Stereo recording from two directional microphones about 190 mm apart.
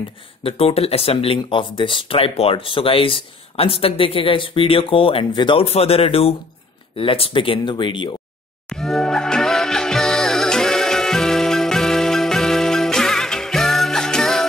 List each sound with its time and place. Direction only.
0.4 s speech: 30° left (ahead or behind)
8.6 s music: centre (ahead or behind)